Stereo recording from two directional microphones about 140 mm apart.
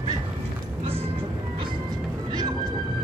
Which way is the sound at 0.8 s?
40° right (ahead or behind).